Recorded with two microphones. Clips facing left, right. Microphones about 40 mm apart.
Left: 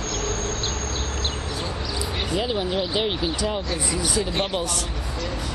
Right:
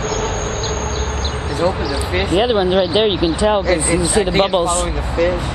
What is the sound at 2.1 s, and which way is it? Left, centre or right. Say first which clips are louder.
Speech: right 11 dB; right.